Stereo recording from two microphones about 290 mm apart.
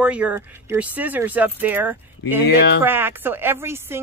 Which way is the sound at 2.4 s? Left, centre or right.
Left.